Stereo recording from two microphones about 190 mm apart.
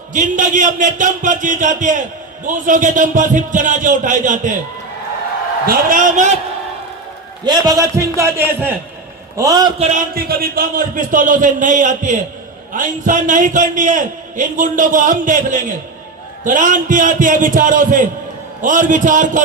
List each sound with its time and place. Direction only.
0.1 s a man's voice: 40° right (ahead or behind)
5.6 s a man's voice: 50° right (ahead or behind)
7.4 s a man's voice: 20° right (ahead or behind)
9.7 s a man's voice: 35° right (ahead or behind)